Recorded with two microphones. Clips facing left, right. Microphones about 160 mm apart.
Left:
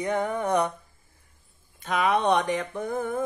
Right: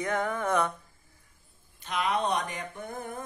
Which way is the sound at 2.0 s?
70° left (ahead or behind).